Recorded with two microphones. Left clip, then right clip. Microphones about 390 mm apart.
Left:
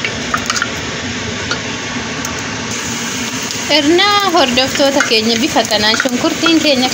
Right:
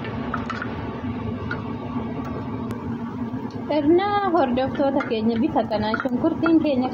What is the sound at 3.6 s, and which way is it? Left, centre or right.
Speech, right.